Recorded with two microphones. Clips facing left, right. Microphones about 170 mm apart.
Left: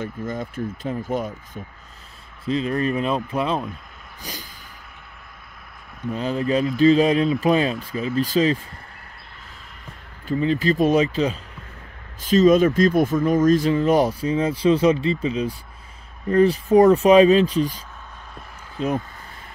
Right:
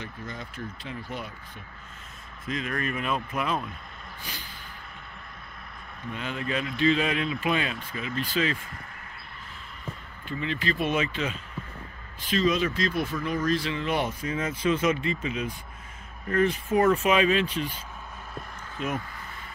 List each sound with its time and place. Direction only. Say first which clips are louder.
0.0 s speech: left 10 dB; 50° left (ahead or behind)
2.4 s speech: left 9 dB; 30° left (ahead or behind)
4.2 s speech: left 7 dB; 40° left (ahead or behind)
6.1 s speech: left 9 dB; 35° left (ahead or behind)
10.2 s speech: left 10 dB; 40° left (ahead or behind)
18.8 s speech: left 7 dB; 35° left (ahead or behind)